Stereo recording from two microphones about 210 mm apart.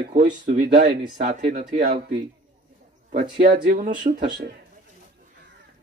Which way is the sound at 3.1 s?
40° right (ahead or behind).